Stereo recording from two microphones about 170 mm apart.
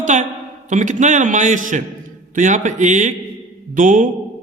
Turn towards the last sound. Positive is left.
turn(degrees=-50)  # may be behind; listen again after turning